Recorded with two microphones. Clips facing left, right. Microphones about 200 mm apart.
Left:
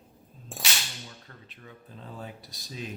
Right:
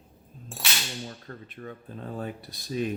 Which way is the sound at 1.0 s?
50° right (ahead or behind).